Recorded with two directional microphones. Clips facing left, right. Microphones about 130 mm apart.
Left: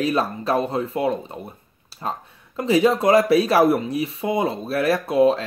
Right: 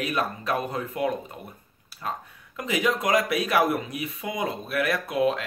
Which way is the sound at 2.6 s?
30° left (ahead or behind).